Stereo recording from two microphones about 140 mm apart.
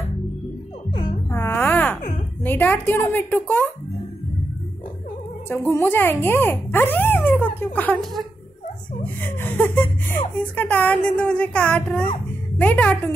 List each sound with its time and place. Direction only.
1.3 s a sound: 15° left (ahead or behind)
2.4 s speech: 15° left (ahead or behind)
5.7 s speech: 15° left (ahead or behind)